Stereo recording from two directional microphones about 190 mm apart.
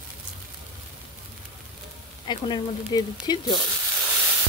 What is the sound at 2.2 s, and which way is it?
Speech, 25° left (ahead or behind).